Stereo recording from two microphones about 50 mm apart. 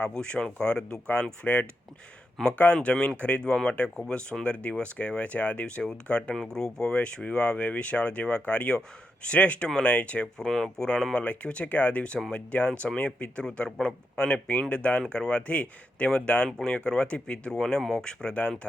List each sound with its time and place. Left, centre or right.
0.0 s speech: left
3.2 s speech: left
10.3 s speech: centre